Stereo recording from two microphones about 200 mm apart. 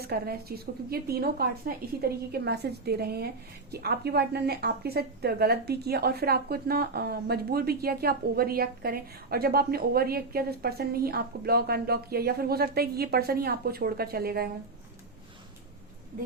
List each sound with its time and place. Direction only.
0.0 s speech: 50° right (ahead or behind)